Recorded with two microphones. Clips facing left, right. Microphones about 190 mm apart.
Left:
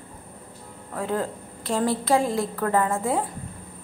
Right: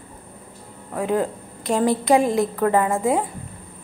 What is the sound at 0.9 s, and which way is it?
A woman's voice, 15° right (ahead or behind).